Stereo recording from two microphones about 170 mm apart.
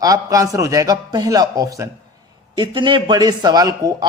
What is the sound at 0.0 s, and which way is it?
A man's voice, 20° right (ahead or behind).